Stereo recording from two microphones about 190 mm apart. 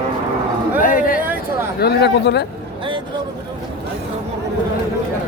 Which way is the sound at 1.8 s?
60° left (ahead or behind).